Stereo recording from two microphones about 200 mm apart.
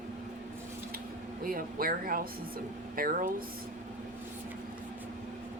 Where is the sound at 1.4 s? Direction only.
45° right (ahead or behind).